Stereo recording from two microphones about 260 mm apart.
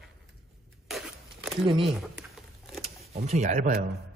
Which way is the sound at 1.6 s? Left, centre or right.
Centre.